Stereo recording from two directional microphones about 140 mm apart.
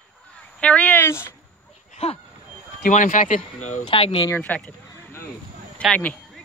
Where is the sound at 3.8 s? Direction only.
40° left (ahead or behind).